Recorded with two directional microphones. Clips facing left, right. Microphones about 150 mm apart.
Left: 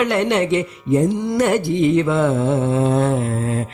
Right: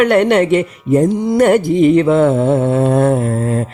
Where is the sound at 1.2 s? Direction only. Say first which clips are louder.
Right 6 dB; 55° right (ahead or behind).